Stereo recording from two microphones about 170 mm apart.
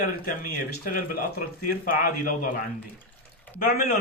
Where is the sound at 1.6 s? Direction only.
60° left (ahead or behind).